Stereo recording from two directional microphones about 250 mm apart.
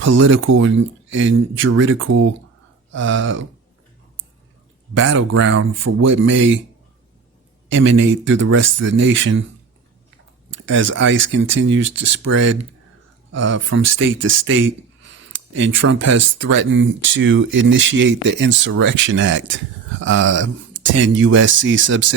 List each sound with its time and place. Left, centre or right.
0.5 s speech: right
4.9 s speech: right
7.7 s speech: right
10.7 s speech: right